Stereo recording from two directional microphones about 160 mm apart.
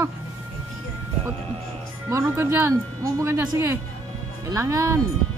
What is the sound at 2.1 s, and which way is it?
Speech, 15° right (ahead or behind).